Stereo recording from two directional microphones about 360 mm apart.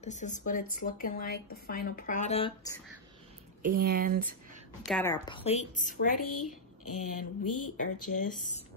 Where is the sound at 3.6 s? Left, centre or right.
Right.